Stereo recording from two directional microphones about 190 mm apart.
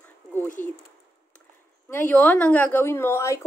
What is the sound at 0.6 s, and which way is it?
Speech, 10° left (ahead or behind).